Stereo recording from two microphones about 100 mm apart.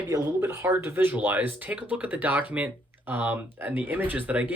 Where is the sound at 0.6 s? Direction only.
20° right (ahead or behind).